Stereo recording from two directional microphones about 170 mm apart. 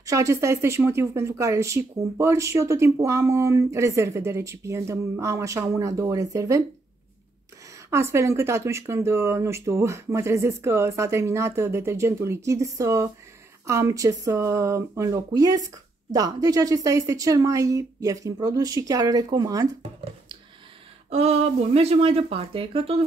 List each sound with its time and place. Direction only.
0.0 s speech: 20° right (ahead or behind)
7.9 s speech: 15° right (ahead or behind)
21.1 s speech: 40° right (ahead or behind)